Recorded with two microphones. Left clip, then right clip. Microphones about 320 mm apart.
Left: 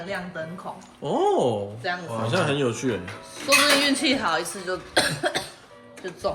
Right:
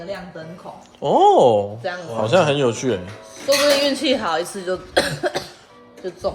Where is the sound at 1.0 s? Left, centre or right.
Centre.